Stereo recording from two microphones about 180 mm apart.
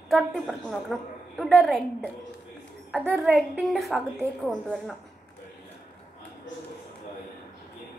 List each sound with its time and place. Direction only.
0.1 s a woman's voice: centre (ahead or behind)
3.2 s a woman's voice: centre (ahead or behind)